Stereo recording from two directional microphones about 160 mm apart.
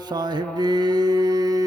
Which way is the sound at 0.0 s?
25° right (ahead or behind).